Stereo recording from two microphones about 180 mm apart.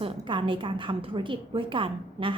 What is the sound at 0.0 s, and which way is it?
A woman's voice, 30° right (ahead or behind).